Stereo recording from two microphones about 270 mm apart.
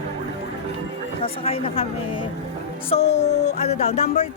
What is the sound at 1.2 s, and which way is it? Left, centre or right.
Speech, left.